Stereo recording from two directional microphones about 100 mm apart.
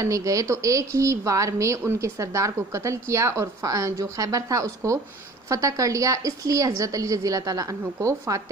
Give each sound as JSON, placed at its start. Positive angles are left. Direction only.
{"t": 0.0, "sound": "a woman's voice", "side_deg": -35}